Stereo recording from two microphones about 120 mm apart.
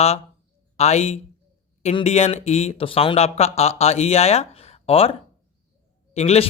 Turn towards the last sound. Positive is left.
turn(degrees=60)  # may be behind; listen again after turning